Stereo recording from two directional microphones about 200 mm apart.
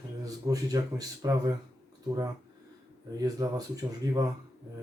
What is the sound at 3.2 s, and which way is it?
Speech, 20° right (ahead or behind).